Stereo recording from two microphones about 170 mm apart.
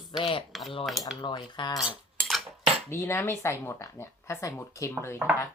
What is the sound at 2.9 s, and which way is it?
Speech, 15° left (ahead or behind).